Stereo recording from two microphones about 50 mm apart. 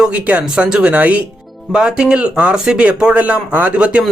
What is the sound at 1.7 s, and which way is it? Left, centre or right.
Speech, centre.